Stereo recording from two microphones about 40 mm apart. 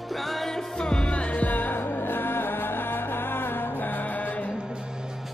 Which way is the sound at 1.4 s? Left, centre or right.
Left.